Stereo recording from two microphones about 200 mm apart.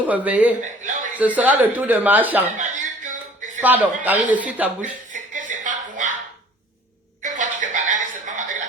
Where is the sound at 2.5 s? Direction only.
40° right (ahead or behind).